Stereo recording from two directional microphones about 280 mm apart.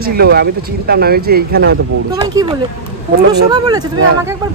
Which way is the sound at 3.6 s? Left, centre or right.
Centre.